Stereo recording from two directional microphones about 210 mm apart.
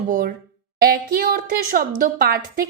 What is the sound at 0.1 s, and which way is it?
A woman's voice, 40° right (ahead or behind).